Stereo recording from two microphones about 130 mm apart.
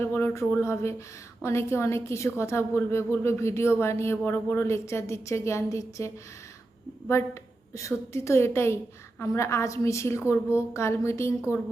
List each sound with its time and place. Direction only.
0.0 s a woman's voice: 15° left (ahead or behind)
7.7 s a woman's voice: 25° left (ahead or behind)